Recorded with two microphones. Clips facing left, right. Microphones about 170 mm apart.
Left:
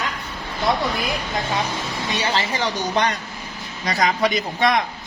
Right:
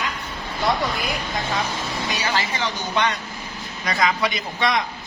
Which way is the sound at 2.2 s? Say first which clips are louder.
Left 4 dB; 30° left (ahead or behind).